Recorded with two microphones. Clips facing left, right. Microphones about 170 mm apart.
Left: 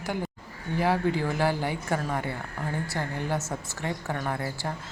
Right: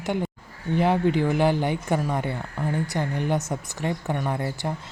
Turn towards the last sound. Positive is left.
turn(degrees=-20)  # may be behind; listen again after turning